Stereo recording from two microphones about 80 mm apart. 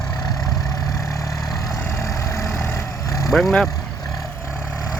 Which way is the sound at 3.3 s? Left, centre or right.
Centre.